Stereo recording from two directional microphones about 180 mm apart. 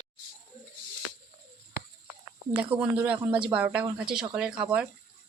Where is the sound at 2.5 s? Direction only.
10° right (ahead or behind).